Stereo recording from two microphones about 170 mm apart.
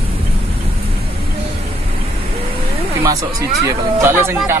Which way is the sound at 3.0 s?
20° right (ahead or behind).